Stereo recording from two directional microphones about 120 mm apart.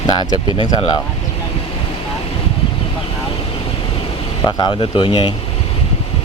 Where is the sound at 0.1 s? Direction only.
40° left (ahead or behind).